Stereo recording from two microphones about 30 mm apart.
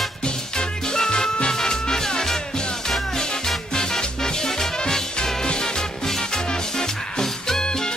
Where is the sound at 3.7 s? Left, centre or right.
Centre.